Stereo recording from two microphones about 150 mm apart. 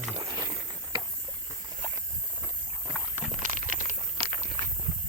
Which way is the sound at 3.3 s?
60° right (ahead or behind).